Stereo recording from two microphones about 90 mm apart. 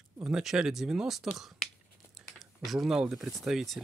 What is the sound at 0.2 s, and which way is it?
Speech, 5° right (ahead or behind).